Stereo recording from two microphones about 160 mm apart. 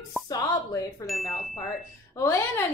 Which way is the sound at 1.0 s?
Centre (ahead or behind).